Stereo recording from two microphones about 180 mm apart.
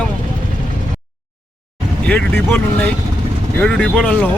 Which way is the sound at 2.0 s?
5° left (ahead or behind).